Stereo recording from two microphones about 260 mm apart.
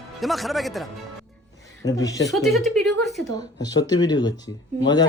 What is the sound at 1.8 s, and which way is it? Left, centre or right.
Speech, centre.